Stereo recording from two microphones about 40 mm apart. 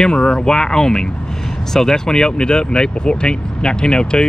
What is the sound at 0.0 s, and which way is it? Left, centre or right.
Speech, centre.